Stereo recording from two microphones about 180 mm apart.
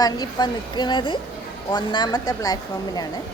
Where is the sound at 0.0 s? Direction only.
25° left (ahead or behind).